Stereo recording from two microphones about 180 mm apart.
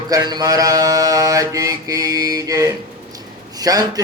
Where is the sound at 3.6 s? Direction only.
20° right (ahead or behind).